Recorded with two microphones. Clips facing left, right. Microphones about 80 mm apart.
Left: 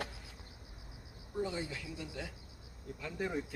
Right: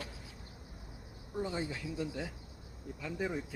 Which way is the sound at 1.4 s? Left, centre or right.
Right.